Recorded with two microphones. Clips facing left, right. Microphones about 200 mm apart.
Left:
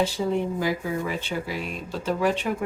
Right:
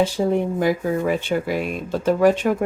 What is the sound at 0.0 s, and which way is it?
Speech, 55° right (ahead or behind).